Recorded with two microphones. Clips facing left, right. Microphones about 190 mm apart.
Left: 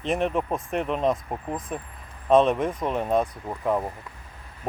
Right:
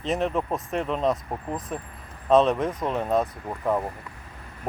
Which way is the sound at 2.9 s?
10° left (ahead or behind).